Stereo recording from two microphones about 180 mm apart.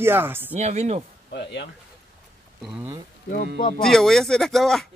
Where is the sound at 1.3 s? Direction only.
75° left (ahead or behind).